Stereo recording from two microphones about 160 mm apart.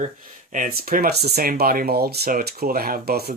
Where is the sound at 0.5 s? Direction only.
60° right (ahead or behind).